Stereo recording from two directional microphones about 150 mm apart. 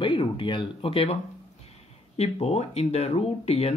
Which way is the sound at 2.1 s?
40° left (ahead or behind).